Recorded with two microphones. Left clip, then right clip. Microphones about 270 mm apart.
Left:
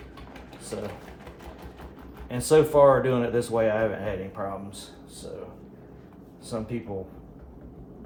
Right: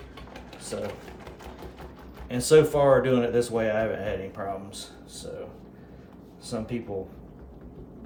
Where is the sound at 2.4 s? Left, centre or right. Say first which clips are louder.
Left 1 dB; centre.